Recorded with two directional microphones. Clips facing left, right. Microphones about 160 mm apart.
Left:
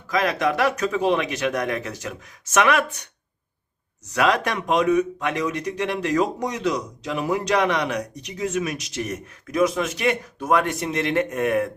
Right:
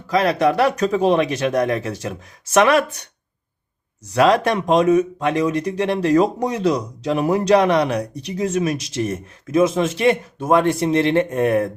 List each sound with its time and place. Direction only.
0.1 s speech: 35° right (ahead or behind)
4.1 s speech: 30° right (ahead or behind)